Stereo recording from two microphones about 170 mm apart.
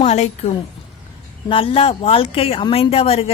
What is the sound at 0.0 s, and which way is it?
Speech, 40° left (ahead or behind).